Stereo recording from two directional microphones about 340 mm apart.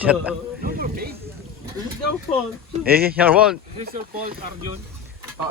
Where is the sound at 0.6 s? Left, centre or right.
Right.